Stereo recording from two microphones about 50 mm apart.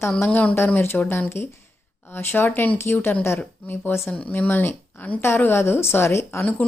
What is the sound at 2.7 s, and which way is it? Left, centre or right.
Speech, left.